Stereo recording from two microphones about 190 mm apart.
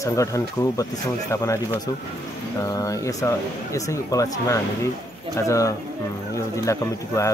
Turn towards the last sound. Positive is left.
turn(degrees=15)  # may be behind; listen again after turning